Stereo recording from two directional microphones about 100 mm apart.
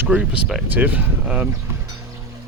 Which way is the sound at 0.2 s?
5° right (ahead or behind).